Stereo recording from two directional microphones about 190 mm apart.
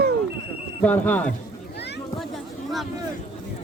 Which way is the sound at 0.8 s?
10° left (ahead or behind).